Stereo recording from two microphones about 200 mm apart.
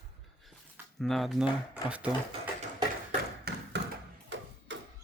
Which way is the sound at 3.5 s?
50° right (ahead or behind).